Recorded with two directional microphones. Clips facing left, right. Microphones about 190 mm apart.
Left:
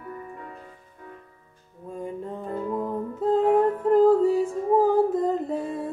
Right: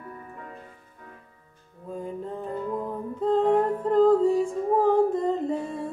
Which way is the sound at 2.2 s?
Centre (ahead or behind).